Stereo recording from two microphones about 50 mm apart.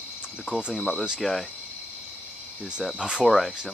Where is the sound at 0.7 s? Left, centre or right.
Centre.